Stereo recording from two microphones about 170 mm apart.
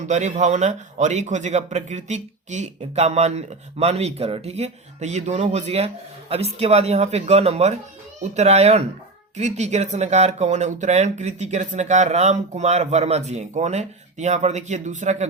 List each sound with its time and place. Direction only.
0.0 s a man's voice: 45° right (ahead or behind)